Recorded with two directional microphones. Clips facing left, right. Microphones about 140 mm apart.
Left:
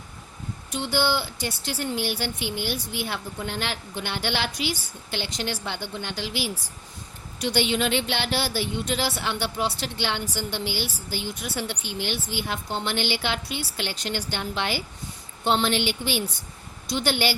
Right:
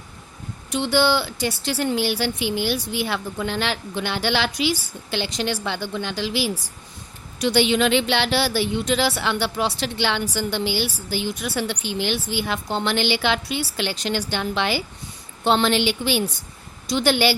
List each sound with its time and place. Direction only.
0.7 s a woman's voice: 80° right